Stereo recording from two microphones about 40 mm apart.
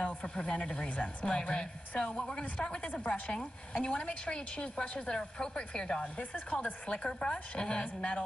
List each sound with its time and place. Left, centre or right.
0.4 s a woman's voice: left
2.8 s a woman's voice: left